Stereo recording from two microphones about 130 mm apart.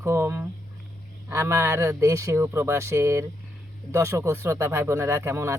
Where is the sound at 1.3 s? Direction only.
20° right (ahead or behind).